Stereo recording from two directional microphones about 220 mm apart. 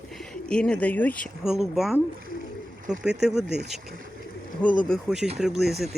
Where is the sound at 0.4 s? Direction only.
5° left (ahead or behind).